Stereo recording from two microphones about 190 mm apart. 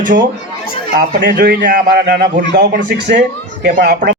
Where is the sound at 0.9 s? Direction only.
50° right (ahead or behind).